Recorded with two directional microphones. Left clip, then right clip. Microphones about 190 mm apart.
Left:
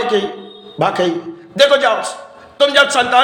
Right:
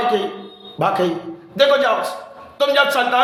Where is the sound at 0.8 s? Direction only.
20° left (ahead or behind).